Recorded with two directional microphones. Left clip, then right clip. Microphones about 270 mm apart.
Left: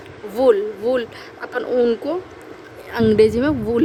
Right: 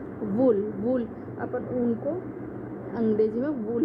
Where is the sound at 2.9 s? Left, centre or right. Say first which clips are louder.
Left 10 dB; left.